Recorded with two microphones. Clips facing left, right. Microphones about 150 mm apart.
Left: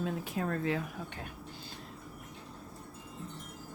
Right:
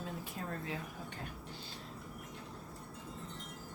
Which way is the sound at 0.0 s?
75° left (ahead or behind).